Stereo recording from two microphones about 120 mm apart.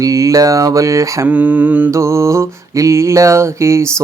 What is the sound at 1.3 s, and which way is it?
Mantra, 15° right (ahead or behind).